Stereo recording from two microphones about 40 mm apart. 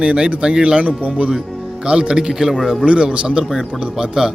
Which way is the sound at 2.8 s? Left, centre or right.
Right.